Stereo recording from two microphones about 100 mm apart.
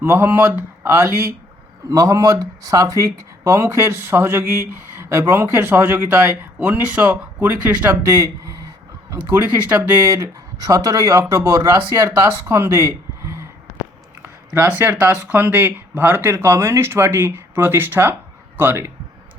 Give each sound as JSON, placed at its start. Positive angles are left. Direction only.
{"t": 0.0, "sound": "speech", "side_deg": -25}
{"t": 8.1, "sound": "a sound", "side_deg": -30}
{"t": 9.1, "sound": "speech", "side_deg": -20}